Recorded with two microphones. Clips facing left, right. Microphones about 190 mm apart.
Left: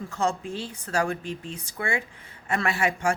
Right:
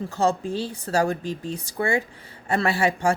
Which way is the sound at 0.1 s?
35° right (ahead or behind).